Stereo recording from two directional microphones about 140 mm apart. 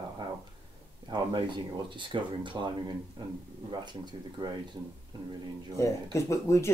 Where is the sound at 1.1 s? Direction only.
35° right (ahead or behind).